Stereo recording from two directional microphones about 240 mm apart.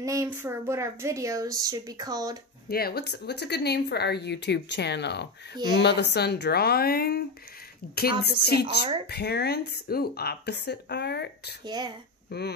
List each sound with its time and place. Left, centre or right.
0.0 s speech: centre
2.7 s a woman's voice: left
11.6 s speech: centre
12.3 s speech: left